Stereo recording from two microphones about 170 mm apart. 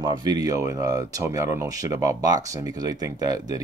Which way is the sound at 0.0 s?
25° right (ahead or behind).